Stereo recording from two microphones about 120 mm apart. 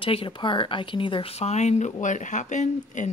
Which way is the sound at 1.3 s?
65° left (ahead or behind).